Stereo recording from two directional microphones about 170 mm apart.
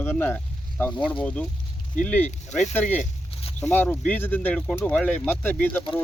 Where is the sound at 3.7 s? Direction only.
10° left (ahead or behind).